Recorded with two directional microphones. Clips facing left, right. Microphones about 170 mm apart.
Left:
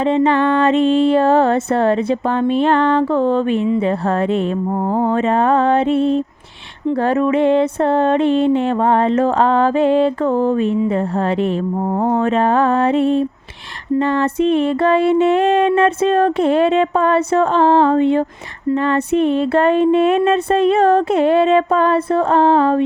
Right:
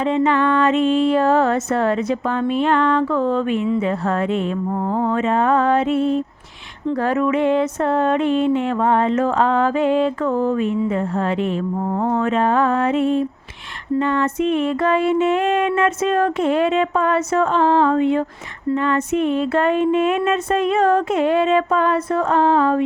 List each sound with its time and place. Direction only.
0.0 s music: 30° left (ahead or behind)
4.9 s mantra: 30° left (ahead or behind)
6.9 s music: 30° left (ahead or behind)